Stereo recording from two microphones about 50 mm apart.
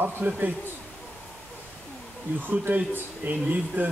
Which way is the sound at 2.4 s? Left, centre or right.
Right.